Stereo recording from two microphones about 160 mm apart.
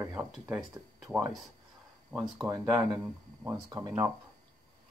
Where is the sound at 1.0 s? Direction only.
10° right (ahead or behind).